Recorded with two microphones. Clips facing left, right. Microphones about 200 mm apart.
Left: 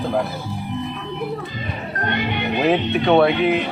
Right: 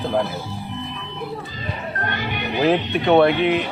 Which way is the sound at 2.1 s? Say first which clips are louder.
Left 6 dB; 20° left (ahead or behind).